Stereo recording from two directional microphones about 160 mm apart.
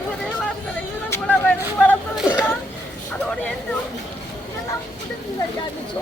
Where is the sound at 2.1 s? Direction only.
Centre (ahead or behind).